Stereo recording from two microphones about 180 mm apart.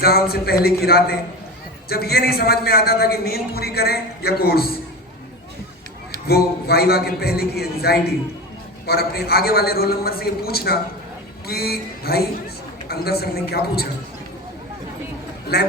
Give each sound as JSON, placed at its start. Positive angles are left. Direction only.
{"t": 0.0, "sound": "a man's voice", "side_deg": 60}
{"t": 6.2, "sound": "a man's voice", "side_deg": 60}
{"t": 15.5, "sound": "a man's voice", "side_deg": 60}